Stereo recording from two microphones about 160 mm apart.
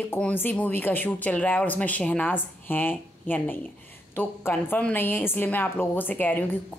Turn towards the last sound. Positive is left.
turn(degrees=10)  # may be behind; listen again after turning